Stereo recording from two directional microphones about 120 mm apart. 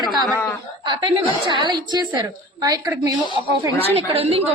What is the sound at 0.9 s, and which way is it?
A woman's voice, 40° right (ahead or behind).